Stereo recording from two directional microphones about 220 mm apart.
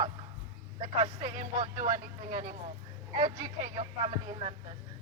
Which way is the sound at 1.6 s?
35° right (ahead or behind).